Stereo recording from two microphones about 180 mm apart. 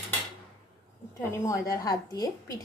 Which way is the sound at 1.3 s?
15° left (ahead or behind).